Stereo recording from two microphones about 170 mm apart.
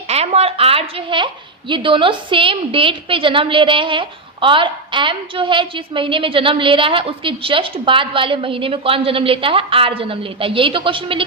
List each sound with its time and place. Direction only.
0.1 s a woman's voice: 40° right (ahead or behind)